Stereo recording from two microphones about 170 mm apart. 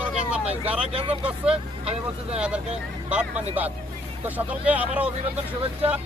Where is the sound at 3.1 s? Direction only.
10° right (ahead or behind).